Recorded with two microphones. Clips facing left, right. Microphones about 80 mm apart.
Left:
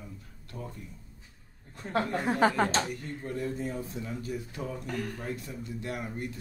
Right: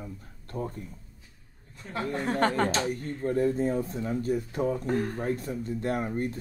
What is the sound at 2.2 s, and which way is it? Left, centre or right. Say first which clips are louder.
Speech: even; centre.